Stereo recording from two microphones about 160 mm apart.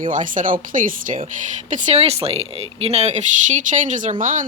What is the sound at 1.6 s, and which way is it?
Speech, 45° right (ahead or behind).